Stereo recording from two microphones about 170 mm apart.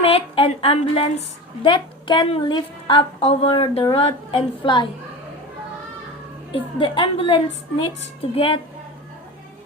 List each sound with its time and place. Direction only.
0.0 s a woman's voice: 35° left (ahead or behind)
6.5 s a woman's voice: 30° left (ahead or behind)